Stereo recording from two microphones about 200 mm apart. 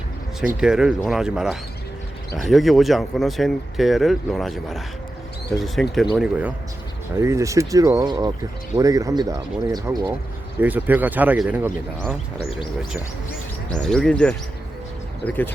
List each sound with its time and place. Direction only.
0.5 s speech: 5° right (ahead or behind)
7.2 s speech: 15° right (ahead or behind)
13.7 s speech: 5° left (ahead or behind)